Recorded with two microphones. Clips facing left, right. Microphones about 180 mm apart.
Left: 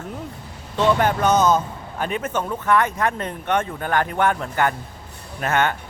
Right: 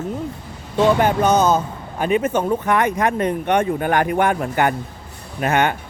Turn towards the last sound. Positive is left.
turn(degrees=-15)  # may be behind; listen again after turning